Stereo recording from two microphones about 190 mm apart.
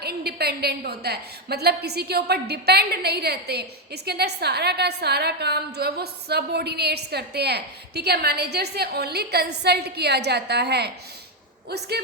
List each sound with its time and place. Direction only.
0.0 s a woman's voice: 55° right (ahead or behind)